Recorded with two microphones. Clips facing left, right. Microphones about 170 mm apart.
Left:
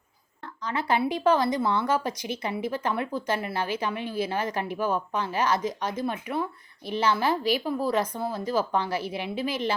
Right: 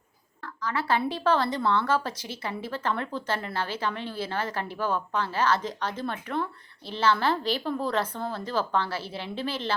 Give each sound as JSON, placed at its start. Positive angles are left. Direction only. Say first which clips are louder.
{"t": 0.4, "sound": "speech", "louder": "even", "side_deg": 20}